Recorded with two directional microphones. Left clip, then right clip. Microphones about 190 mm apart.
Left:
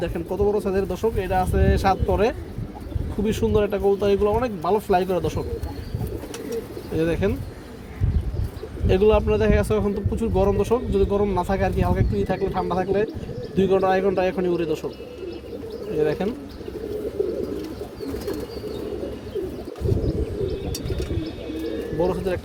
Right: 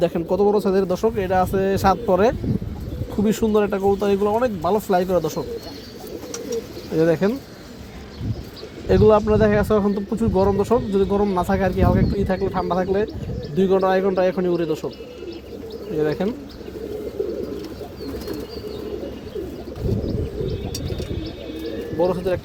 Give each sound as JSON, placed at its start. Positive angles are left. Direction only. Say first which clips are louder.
{"t": 0.0, "sound": "speech", "louder": "right 5 dB", "side_deg": -45}
{"t": 6.9, "sound": "speech", "louder": "right 5 dB", "side_deg": -35}
{"t": 8.9, "sound": "speech", "louder": "right 3 dB", "side_deg": -35}
{"t": 16.0, "sound": "speech", "louder": "right 1 dB", "side_deg": -35}
{"t": 22.0, "sound": "speech", "louder": "right 4 dB", "side_deg": -40}